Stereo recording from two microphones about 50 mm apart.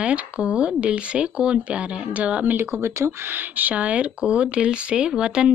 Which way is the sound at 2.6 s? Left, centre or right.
Right.